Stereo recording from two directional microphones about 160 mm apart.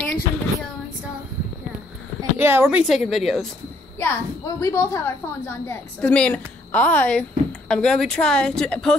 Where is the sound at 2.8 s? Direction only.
Centre (ahead or behind).